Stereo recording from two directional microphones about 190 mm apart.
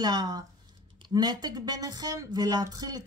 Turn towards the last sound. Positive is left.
turn(degrees=-20)  # may be behind; listen again after turning